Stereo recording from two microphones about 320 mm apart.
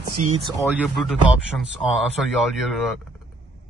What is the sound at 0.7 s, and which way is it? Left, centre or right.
A man's voice, centre.